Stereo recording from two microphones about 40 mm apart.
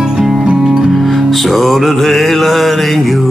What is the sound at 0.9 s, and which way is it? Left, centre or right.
Music, centre.